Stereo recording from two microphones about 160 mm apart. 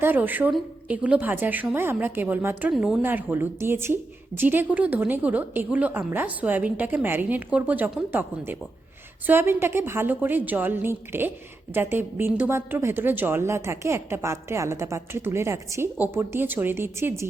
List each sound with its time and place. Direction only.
0.0 s speech: 10° right (ahead or behind)